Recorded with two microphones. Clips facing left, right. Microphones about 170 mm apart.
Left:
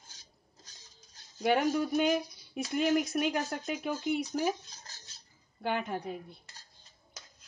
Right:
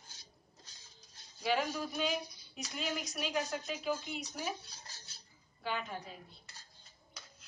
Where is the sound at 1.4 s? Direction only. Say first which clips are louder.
Left 7 dB; 55° left (ahead or behind).